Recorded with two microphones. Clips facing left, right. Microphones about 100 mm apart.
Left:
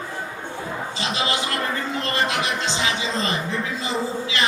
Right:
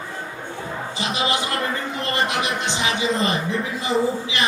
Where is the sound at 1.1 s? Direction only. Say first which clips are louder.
Right 2 dB; 20° right (ahead or behind).